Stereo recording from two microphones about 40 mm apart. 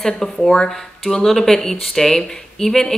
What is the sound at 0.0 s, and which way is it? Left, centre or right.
Speech, centre.